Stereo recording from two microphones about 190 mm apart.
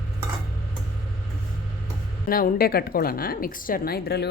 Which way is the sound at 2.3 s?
50° left (ahead or behind).